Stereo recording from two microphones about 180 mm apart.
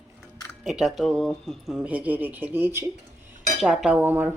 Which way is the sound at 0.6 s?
Centre (ahead or behind).